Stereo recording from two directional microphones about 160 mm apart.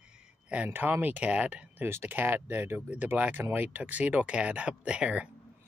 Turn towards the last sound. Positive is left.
turn(degrees=-5)  # may be behind; listen again after turning